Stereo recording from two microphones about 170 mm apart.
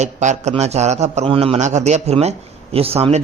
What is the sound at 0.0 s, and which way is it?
A man's voice, 45° right (ahead or behind).